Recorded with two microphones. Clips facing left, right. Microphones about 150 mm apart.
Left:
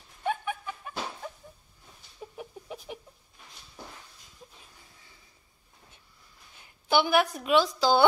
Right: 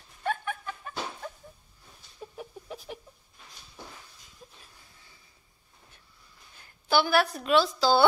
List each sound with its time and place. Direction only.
0.2 s chicken: 10° left (ahead or behind)
6.6 s a sound: 20° left (ahead or behind)
7.3 s a woman's voice: 15° left (ahead or behind)